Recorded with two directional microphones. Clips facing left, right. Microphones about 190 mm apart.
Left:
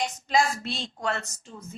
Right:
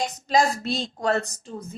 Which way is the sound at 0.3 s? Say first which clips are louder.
Right 4 dB; 40° right (ahead or behind).